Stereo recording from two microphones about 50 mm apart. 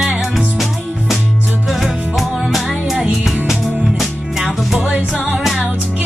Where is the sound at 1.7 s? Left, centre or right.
Centre.